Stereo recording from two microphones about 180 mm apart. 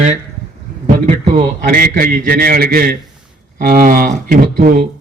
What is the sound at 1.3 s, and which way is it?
A man's voice, 50° right (ahead or behind).